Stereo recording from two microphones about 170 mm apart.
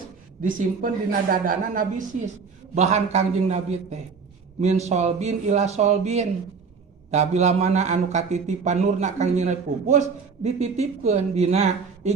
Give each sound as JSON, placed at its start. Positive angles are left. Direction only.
{"t": 0.4, "sound": "a man's voice", "side_deg": -55}
{"t": 2.7, "sound": "a man's voice", "side_deg": -40}